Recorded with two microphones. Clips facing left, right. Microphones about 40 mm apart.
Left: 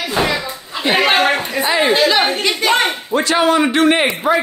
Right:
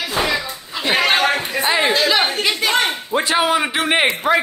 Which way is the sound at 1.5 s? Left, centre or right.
Centre.